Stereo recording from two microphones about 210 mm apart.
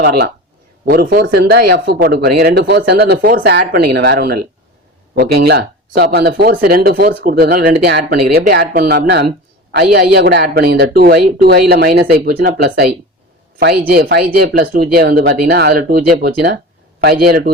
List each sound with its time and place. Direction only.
0.9 s speech: 45° right (ahead or behind)